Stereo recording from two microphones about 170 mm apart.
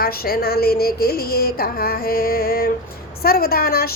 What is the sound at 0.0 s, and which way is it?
A woman's voice, 60° left (ahead or behind).